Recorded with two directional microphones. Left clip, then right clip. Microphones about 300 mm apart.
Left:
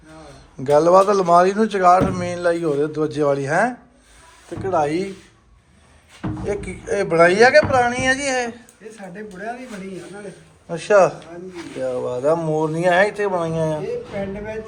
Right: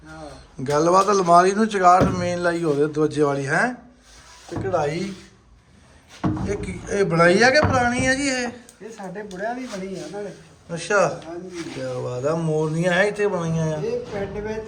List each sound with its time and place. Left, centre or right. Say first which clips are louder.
0.6 s speech: left 4 dB; centre
6.4 s speech: left 3 dB; centre
9.1 s speech: right 2 dB; right
10.7 s speech: left 5 dB; centre